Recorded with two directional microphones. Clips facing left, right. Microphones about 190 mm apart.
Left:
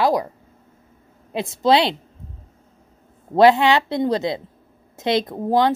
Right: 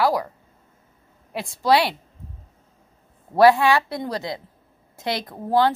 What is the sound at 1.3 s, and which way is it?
Speech, 20° left (ahead or behind).